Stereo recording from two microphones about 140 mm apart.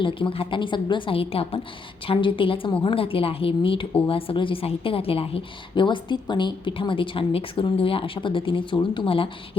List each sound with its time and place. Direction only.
0.0 s a woman's voice: 40° left (ahead or behind)